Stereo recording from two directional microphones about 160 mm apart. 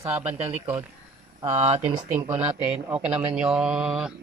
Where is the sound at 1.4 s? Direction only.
20° right (ahead or behind).